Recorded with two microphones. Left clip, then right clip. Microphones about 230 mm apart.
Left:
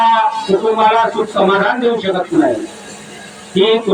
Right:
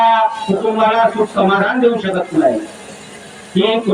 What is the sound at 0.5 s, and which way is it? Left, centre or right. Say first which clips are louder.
A man's voice: left 4 dB; left.